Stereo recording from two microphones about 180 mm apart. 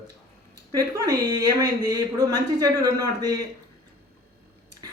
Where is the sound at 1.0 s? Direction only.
20° right (ahead or behind).